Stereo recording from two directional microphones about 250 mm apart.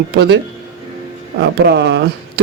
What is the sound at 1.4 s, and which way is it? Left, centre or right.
Speech, right.